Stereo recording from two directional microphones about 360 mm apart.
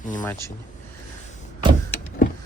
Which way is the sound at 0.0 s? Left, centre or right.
Left.